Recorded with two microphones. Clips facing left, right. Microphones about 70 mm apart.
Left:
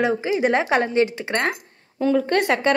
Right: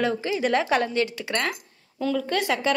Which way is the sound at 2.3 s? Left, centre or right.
Left.